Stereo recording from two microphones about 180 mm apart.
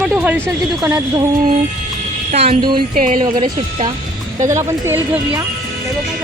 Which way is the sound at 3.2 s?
25° right (ahead or behind).